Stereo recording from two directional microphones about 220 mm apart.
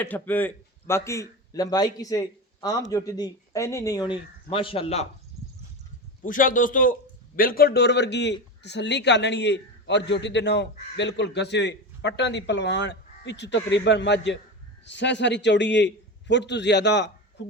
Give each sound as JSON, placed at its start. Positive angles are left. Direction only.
{"t": 0.0, "sound": "a man's voice", "side_deg": 10}
{"t": 6.2, "sound": "a man's voice", "side_deg": 35}